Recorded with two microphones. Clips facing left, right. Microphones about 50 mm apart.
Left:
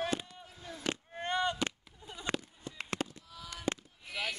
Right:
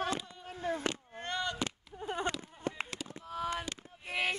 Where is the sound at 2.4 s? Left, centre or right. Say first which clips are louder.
Right 7 dB; right.